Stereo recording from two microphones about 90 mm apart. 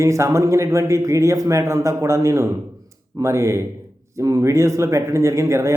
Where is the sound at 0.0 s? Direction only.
35° right (ahead or behind).